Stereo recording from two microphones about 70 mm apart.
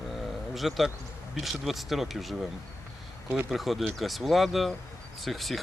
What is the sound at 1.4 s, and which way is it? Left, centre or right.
Speech, centre.